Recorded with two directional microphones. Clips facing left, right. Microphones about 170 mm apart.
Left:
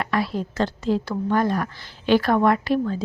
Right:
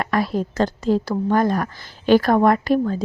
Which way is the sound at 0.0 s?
45° right (ahead or behind).